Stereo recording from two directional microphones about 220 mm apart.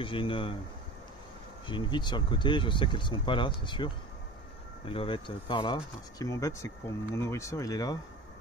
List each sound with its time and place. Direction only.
0.0 s speech: 25° left (ahead or behind)
1.7 s speech: 20° left (ahead or behind)